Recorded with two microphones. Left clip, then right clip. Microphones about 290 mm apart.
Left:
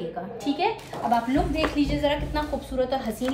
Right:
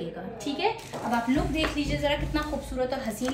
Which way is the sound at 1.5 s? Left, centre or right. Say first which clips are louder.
Left 3 dB; centre.